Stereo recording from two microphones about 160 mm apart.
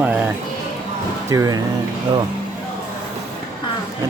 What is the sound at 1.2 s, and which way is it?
Speech, 20° right (ahead or behind).